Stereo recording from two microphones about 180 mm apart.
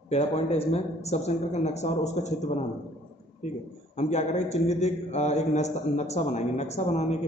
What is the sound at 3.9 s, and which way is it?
A man's voice, 40° left (ahead or behind).